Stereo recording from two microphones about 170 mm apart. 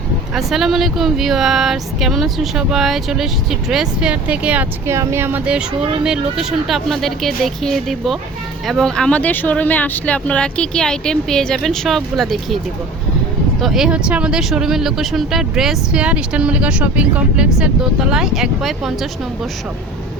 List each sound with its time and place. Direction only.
0.3 s speech: centre (ahead or behind)
13.6 s speech: centre (ahead or behind)